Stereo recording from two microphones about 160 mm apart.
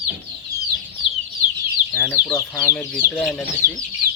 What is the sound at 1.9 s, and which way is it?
Speech, 15° left (ahead or behind).